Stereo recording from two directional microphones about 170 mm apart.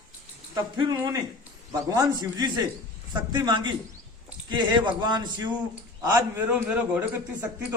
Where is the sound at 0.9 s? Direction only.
20° right (ahead or behind).